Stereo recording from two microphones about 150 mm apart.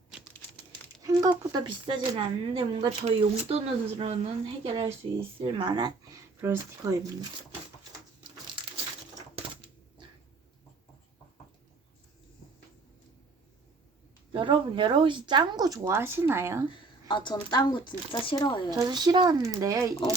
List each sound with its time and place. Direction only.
1.0 s speech: 25° right (ahead or behind)
9.3 s typewriter: 35° right (ahead or behind)
14.3 s speech: 35° right (ahead or behind); by 16.6 s 15° right (ahead or behind)
16.7 s speech: 30° left (ahead or behind)
18.7 s speech: 25° right (ahead or behind)